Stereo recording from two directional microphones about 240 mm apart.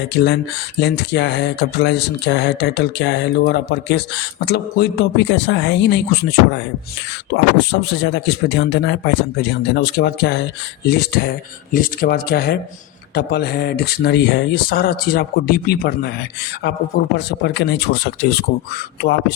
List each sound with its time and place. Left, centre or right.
0.1 s speech: left
17.2 s speech: left